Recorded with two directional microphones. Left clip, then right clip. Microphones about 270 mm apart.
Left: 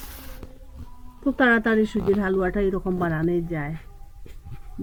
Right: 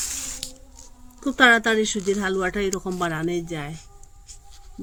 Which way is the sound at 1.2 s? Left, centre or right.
Right.